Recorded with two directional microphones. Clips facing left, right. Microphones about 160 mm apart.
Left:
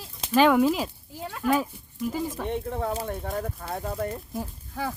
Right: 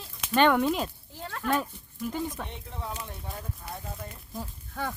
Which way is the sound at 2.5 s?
55° left (ahead or behind).